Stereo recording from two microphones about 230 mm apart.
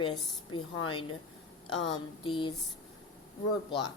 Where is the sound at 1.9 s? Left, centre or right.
Left.